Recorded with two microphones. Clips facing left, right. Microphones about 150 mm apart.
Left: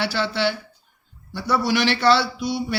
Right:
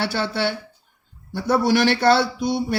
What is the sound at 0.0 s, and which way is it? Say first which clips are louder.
A man's voice: even; 55° right (ahead or behind).